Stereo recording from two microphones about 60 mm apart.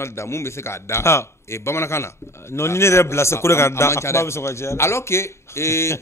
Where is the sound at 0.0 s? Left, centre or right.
Left.